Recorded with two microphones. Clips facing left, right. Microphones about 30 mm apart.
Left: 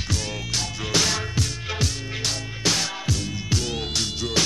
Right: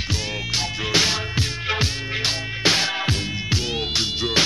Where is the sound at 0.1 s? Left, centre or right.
Right.